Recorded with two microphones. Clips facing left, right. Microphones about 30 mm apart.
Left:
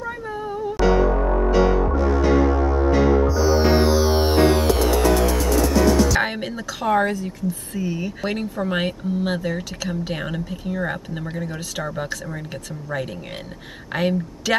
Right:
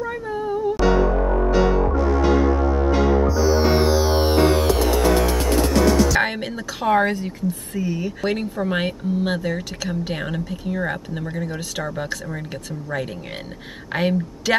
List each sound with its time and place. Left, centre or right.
0.0 s music: centre
6.0 s a woman's voice: centre
7.1 s a woman's voice: right
7.7 s speech: centre
13.9 s a woman's voice: centre